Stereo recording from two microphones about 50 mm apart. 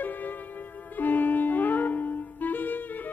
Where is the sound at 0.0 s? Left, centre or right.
Left.